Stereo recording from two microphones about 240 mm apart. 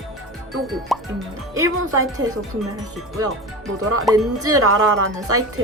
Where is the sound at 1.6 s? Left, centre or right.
Right.